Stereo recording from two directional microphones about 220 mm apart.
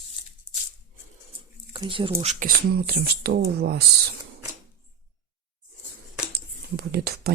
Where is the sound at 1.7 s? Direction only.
20° right (ahead or behind).